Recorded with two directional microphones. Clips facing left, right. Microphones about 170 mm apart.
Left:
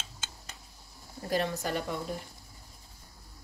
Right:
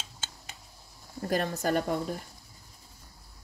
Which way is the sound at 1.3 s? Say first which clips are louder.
Right 3 dB; 45° right (ahead or behind).